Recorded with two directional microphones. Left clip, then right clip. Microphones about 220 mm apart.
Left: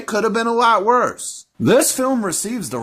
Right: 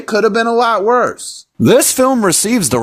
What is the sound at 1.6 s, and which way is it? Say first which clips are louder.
Speech: right 5 dB; 50° right (ahead or behind).